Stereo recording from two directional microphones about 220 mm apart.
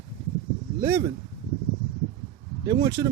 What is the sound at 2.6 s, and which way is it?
Speech, 15° right (ahead or behind).